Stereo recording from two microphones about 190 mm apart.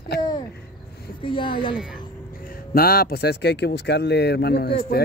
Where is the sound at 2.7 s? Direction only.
50° left (ahead or behind).